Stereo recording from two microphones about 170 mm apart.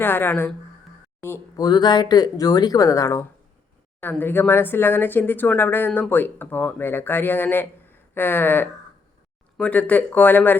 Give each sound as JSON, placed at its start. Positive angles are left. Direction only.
{"t": 0.0, "sound": "speech", "side_deg": 10}